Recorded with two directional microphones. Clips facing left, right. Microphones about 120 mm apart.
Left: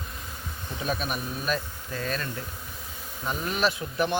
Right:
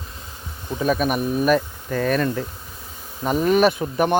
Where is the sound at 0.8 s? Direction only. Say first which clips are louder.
Right 10 dB; 50° right (ahead or behind).